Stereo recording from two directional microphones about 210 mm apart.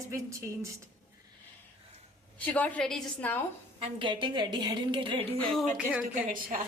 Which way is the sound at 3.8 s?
25° right (ahead or behind).